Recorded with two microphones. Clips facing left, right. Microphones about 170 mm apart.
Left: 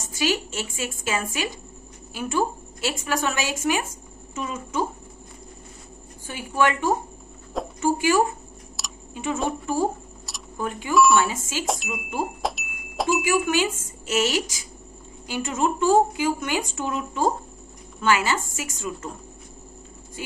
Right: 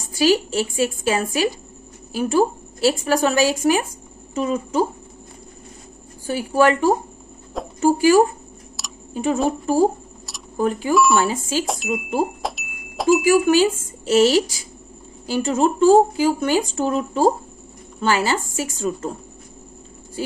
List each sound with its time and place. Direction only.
0.1 s a woman's voice: 35° right (ahead or behind)
6.2 s speech: 35° right (ahead or behind)
8.8 s a sound: centre (ahead or behind)
9.1 s speech: 35° right (ahead or behind)
10.6 s speech: 35° right (ahead or behind)
11.6 s speech: centre (ahead or behind)
11.9 s speech: 35° right (ahead or behind)
12.4 s a sound: centre (ahead or behind)
13.2 s speech: 35° right (ahead or behind)
20.2 s speech: 35° right (ahead or behind)